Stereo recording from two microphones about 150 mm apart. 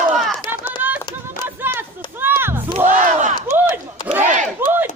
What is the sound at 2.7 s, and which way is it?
Battle cry, 55° right (ahead or behind).